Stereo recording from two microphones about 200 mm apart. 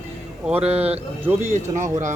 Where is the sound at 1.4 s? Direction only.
35° right (ahead or behind).